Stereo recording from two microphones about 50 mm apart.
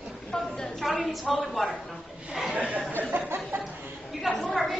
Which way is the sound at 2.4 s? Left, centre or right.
Right.